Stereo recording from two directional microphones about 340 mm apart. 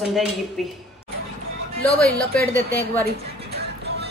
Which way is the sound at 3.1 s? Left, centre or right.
Right.